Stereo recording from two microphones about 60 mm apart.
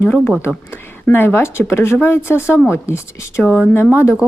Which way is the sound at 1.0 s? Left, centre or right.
Left.